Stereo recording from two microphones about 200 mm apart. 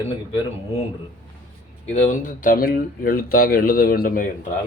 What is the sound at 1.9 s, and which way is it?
Speech, 40° left (ahead or behind).